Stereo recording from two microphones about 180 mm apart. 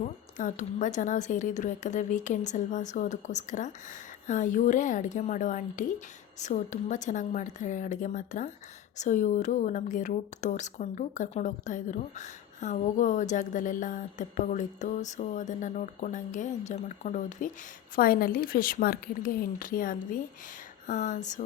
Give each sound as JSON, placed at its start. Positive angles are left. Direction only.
{"t": 0.0, "sound": "speech", "side_deg": 45}